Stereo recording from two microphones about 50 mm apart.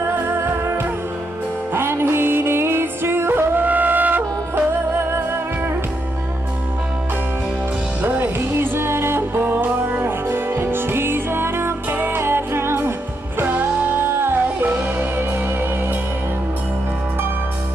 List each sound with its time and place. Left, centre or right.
0.0 s music: right
3.6 s music: right
8.0 s music: right
13.4 s music: right
14.2 s music: right